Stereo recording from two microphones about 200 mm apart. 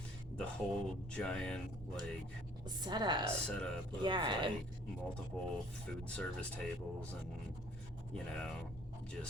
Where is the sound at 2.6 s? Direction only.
20° right (ahead or behind).